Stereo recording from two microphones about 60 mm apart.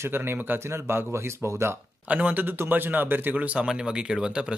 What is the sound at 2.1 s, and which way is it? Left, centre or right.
Speech, right.